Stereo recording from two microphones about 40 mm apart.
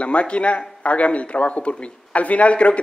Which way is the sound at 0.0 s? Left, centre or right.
Left.